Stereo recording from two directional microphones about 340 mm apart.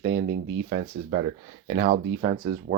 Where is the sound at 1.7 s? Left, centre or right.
Right.